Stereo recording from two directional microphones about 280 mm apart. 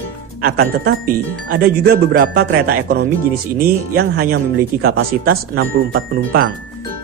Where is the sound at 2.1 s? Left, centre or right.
Right.